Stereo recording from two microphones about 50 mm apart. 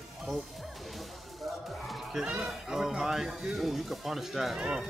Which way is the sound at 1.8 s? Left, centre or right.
Centre.